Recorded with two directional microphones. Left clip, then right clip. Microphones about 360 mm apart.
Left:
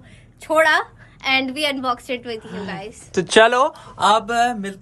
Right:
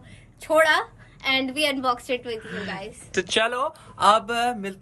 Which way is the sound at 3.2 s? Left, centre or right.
Left.